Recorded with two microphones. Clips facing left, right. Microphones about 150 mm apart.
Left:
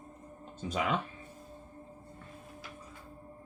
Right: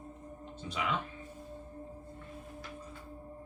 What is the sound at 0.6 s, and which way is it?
Speech, 45° left (ahead or behind).